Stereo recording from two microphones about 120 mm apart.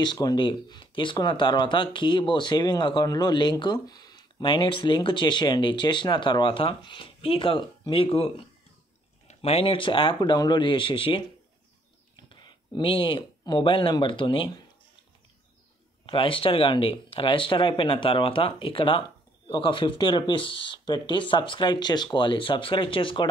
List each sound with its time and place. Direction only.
0.0 s speech: 35° left (ahead or behind); by 8.3 s 50° left (ahead or behind)
9.3 s speech: 60° left (ahead or behind)
12.2 s a sound: 40° left (ahead or behind)
13.4 s speech: 40° left (ahead or behind)
16.1 s speech: 45° left (ahead or behind)